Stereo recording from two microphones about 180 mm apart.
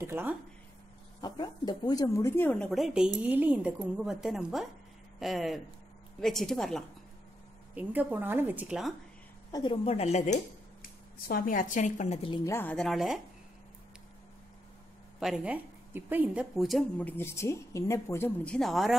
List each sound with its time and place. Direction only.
0.0 s speech: 10° right (ahead or behind)
1.2 s a woman's voice: 25° left (ahead or behind); by 6.8 s centre (ahead or behind)
7.7 s a woman's voice: 10° right (ahead or behind)
9.5 s speech: 25° left (ahead or behind); by 10.4 s 40° left (ahead or behind)
11.2 s a woman's voice: 50° left (ahead or behind)
12.3 s a woman's voice: 15° left (ahead or behind); by 13.2 s centre (ahead or behind)
15.1 s a woman's voice: 5° right (ahead or behind)
17.2 s speech: 15° left (ahead or behind)